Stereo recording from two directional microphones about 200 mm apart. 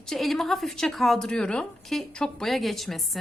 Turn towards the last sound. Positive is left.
turn(degrees=0)  # may be behind; listen again after turning